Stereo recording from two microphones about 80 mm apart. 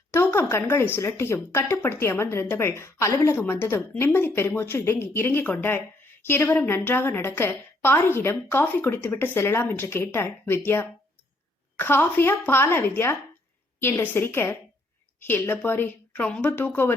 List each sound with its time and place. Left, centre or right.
0.1 s a woman's voice: left